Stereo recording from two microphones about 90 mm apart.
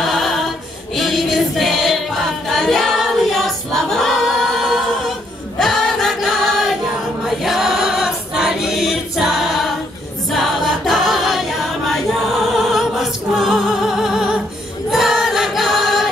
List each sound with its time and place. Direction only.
0.0 s a capella: centre (ahead or behind)
0.9 s choir: centre (ahead or behind)
13.7 s music: 5° right (ahead or behind)
14.9 s choir: 5° right (ahead or behind)